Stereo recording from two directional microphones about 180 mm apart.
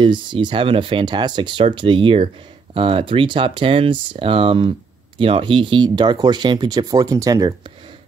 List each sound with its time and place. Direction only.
0.0 s speech: 25° right (ahead or behind)